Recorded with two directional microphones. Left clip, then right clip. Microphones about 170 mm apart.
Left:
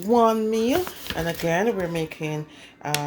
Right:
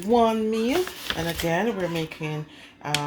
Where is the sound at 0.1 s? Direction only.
10° left (ahead or behind).